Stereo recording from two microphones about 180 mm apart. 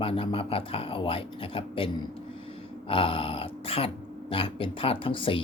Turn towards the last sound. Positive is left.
turn(degrees=30)  # may be behind; listen again after turning